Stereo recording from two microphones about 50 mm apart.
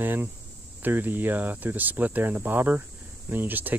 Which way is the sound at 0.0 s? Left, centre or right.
Right.